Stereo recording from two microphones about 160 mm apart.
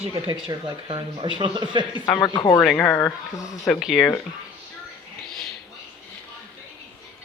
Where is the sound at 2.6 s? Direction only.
10° left (ahead or behind).